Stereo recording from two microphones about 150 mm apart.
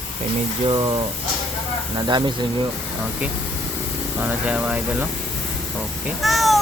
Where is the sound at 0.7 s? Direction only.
30° right (ahead or behind).